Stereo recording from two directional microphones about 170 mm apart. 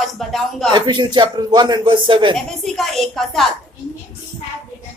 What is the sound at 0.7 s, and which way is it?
A man's voice, 25° right (ahead or behind).